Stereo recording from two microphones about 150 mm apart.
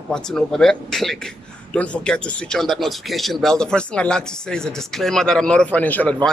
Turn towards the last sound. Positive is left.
turn(degrees=10)  # may be behind; listen again after turning